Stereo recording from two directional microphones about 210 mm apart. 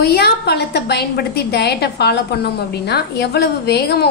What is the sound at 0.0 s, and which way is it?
A woman's voice, 50° left (ahead or behind).